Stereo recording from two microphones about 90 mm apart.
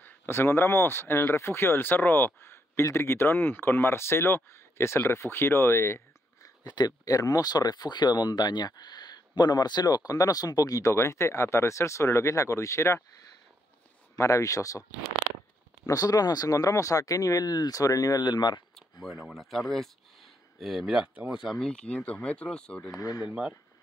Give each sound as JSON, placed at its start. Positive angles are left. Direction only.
{"t": 0.0, "sound": "speech", "side_deg": 25}
{"t": 6.6, "sound": "speech", "side_deg": 50}
{"t": 14.1, "sound": "speech", "side_deg": 35}
{"t": 18.2, "sound": "speech", "side_deg": 55}
{"t": 18.8, "sound": "a sound", "side_deg": 0}
{"t": 19.2, "sound": "speech", "side_deg": 0}
{"t": 21.5, "sound": "speech", "side_deg": 5}
{"t": 22.9, "sound": "speech", "side_deg": 40}
{"t": 23.2, "sound": "speech", "side_deg": -10}